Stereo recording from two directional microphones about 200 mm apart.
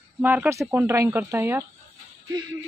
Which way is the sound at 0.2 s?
10° right (ahead or behind).